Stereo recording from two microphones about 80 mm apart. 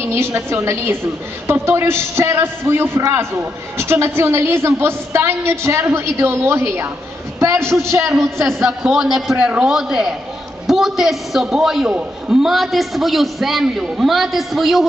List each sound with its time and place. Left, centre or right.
0.0 s a woman's voice: right
8.5 s a man's voice: centre